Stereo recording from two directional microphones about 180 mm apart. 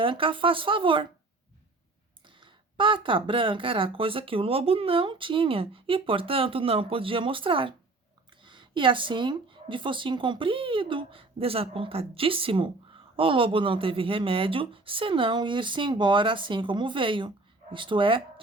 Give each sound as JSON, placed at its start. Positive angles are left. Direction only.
{"t": 0.0, "sound": "speech", "side_deg": -30}
{"t": 2.2, "sound": "speech", "side_deg": -25}